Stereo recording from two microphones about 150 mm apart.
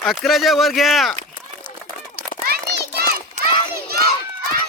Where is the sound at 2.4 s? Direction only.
90° right.